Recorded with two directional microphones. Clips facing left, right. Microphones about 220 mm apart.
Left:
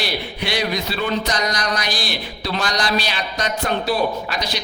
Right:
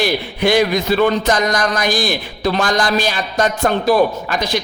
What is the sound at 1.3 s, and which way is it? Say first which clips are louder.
Speech: right 6 dB; 50° right (ahead or behind).